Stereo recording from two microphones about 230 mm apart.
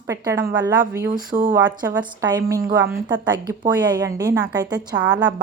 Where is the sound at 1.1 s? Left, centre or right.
Right.